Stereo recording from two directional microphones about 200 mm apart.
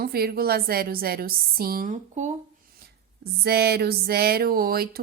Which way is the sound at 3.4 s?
50° right (ahead or behind).